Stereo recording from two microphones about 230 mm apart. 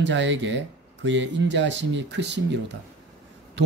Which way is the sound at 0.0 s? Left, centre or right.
Right.